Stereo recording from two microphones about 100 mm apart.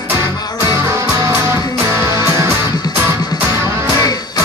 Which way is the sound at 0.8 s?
25° right (ahead or behind).